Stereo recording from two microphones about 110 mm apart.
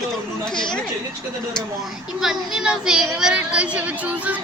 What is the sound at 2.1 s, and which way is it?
A woman's voice, 5° right (ahead or behind).